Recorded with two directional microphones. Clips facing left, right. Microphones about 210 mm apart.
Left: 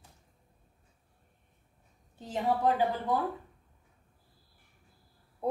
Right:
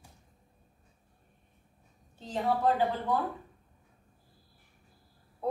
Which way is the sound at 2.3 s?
15° left (ahead or behind).